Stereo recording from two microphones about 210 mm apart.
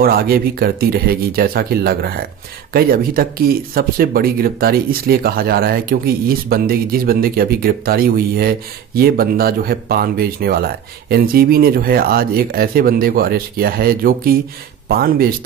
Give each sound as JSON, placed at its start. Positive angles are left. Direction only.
{"t": 0.0, "sound": "speech", "side_deg": -45}